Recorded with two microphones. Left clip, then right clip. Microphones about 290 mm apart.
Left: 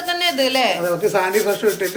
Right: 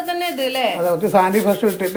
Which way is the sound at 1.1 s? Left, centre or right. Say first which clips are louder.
Right 2 dB; right.